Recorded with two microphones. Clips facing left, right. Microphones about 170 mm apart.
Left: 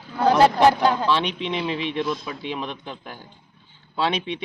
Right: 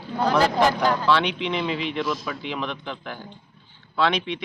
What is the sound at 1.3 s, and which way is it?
Speech, 35° left (ahead or behind).